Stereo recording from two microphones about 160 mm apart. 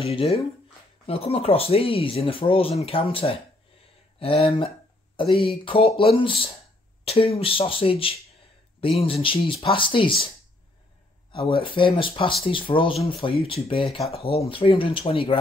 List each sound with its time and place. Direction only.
0.0 s speech: 35° left (ahead or behind)
11.3 s speech: 35° left (ahead or behind)